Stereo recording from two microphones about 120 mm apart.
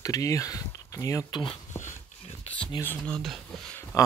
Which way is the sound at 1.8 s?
90° left.